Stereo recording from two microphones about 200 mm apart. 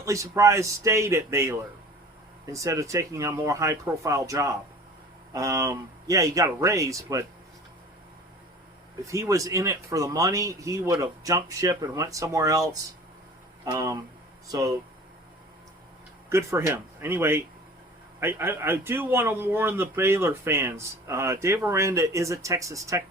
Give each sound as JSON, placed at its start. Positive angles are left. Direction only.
{"t": 0.0, "sound": "a man's voice", "side_deg": -15}
{"t": 9.0, "sound": "a man's voice", "side_deg": -15}
{"t": 16.3, "sound": "a man's voice", "side_deg": -15}